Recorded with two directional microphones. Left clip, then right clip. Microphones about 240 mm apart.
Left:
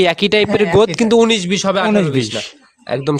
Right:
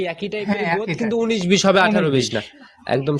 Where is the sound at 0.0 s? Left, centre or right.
Left.